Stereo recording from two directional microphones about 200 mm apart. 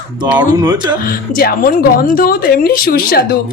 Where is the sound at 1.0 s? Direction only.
45° left (ahead or behind).